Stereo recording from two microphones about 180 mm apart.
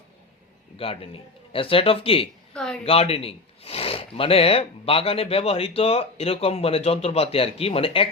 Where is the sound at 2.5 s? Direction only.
5° left (ahead or behind).